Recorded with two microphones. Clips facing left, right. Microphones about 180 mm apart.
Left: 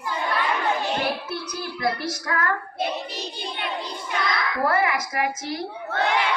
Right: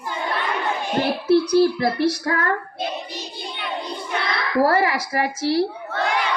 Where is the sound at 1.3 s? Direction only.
35° right (ahead or behind).